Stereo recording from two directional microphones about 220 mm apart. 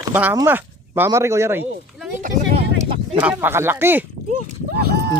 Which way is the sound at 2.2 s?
25° right (ahead or behind).